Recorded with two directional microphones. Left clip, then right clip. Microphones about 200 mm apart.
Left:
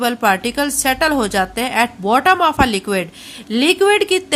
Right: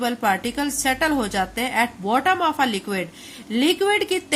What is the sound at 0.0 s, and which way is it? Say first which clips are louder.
Speech: left 6 dB; 30° left (ahead or behind).